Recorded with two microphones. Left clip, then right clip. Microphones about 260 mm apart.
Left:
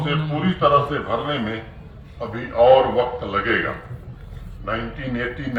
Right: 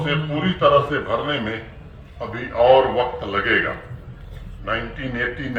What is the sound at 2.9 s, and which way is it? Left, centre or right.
Speech, right.